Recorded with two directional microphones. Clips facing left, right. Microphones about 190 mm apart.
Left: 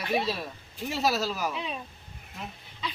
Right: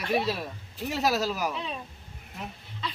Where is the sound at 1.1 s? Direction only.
15° right (ahead or behind).